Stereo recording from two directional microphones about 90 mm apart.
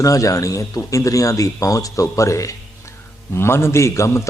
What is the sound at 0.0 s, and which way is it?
A man's voice, 40° left (ahead or behind).